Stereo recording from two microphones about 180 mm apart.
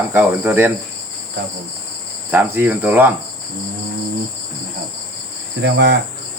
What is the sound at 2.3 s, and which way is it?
Cricket, 10° right (ahead or behind).